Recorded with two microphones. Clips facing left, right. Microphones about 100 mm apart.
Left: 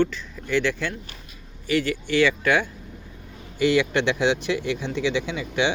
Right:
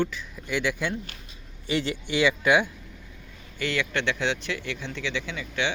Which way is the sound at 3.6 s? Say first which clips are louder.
Left 8 dB; 15° left (ahead or behind).